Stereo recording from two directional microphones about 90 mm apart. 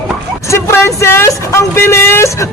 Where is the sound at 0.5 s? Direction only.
30° left (ahead or behind).